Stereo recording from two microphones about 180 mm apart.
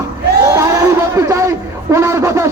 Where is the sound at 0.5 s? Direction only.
15° right (ahead or behind).